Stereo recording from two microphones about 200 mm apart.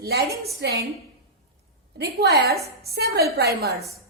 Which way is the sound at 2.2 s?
50° right (ahead or behind).